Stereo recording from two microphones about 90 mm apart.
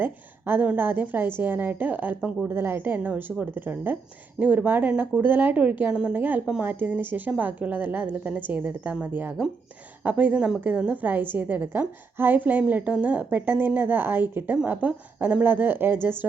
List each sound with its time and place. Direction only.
0.0 s a woman's voice: 25° right (ahead or behind)